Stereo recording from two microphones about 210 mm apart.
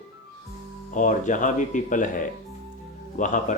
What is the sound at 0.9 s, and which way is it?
Speech, 40° left (ahead or behind).